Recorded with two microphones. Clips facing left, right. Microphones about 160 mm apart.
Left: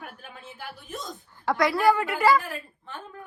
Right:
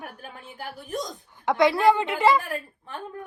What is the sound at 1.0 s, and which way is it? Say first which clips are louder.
A woman's voice: left 1 dB; 20° right (ahead or behind).